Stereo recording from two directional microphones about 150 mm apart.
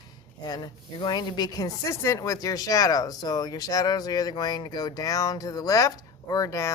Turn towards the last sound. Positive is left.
turn(degrees=20)  # may be behind; listen again after turning